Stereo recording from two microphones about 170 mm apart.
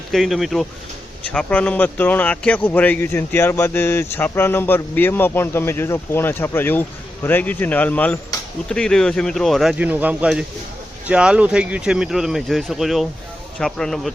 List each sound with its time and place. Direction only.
0.1 s a man's voice: centre (ahead or behind)